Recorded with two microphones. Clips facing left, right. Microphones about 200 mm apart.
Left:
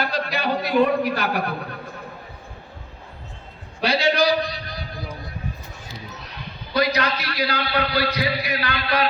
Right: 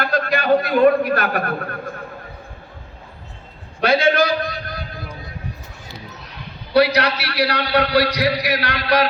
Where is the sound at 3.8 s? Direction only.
50° right (ahead or behind).